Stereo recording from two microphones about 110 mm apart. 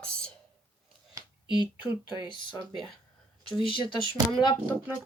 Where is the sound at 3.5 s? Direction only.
50° left (ahead or behind).